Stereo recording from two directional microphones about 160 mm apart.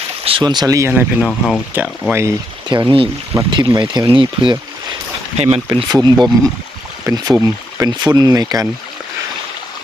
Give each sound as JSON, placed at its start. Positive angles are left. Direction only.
{"t": 0.3, "sound": "speech", "side_deg": -30}
{"t": 1.2, "sound": "speech", "side_deg": 0}
{"t": 1.7, "sound": "speech", "side_deg": -10}
{"t": 2.6, "sound": "speech", "side_deg": -30}
{"t": 5.6, "sound": "speech", "side_deg": -25}